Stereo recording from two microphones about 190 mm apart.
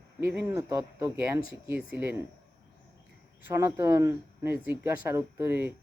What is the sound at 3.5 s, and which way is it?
Speech, 15° right (ahead or behind).